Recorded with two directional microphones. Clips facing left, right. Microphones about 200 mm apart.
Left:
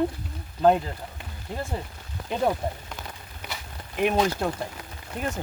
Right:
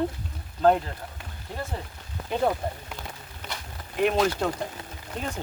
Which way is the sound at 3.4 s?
10° left (ahead or behind).